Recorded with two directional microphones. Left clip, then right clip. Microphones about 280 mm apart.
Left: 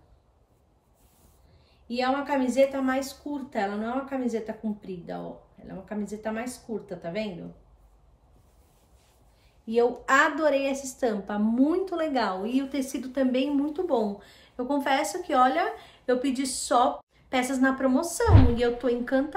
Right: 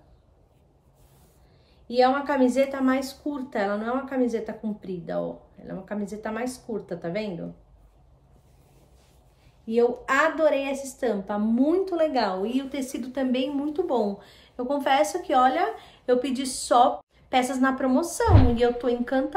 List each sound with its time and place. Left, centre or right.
1.9 s a woman's voice: centre
10.0 s a woman's voice: centre